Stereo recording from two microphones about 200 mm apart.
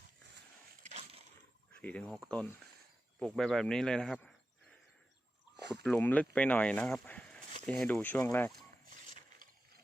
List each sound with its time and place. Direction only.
0.8 s a sound: 35° right (ahead or behind)
1.8 s speech: 5° left (ahead or behind)
5.7 s speech: 5° left (ahead or behind)